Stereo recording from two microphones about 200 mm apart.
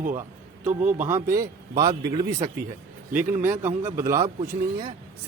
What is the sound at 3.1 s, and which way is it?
A man's voice, 10° right (ahead or behind).